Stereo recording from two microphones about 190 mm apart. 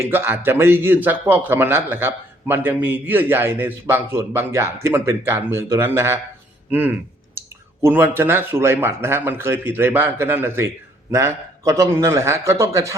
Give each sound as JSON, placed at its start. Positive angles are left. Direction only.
{"t": 0.0, "sound": "speech", "side_deg": -10}